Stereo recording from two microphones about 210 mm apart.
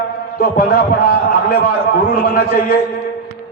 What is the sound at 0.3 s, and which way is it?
A man's voice, 45° left (ahead or behind).